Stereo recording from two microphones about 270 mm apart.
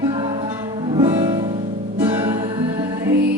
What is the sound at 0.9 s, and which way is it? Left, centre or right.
Music, centre.